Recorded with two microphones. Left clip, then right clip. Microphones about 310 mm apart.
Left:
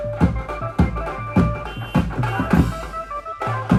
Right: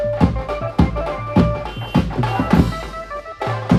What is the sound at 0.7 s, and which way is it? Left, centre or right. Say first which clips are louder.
Music: right 4 dB; right.